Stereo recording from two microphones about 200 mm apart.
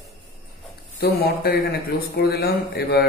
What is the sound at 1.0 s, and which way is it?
A man's voice, 50° left (ahead or behind).